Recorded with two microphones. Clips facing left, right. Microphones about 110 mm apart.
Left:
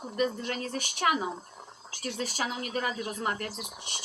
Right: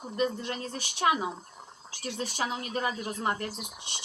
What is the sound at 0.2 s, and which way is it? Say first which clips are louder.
Speech: even; 25° right (ahead or behind).